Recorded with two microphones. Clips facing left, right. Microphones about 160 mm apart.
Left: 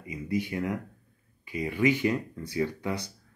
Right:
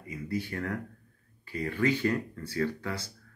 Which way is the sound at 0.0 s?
15° left (ahead or behind).